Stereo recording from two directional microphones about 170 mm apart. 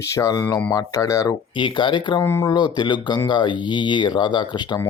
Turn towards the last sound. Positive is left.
turn(degrees=25)  # may be behind; listen again after turning